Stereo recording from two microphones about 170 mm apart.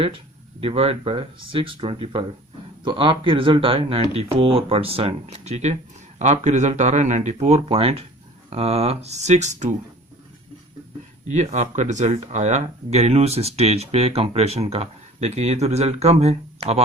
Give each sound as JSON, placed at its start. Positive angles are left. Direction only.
{"t": 0.6, "sound": "speech", "side_deg": -35}
{"t": 11.3, "sound": "speech", "side_deg": -45}